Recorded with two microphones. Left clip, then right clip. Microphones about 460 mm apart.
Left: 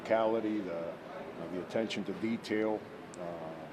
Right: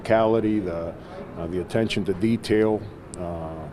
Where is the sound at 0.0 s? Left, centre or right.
Right.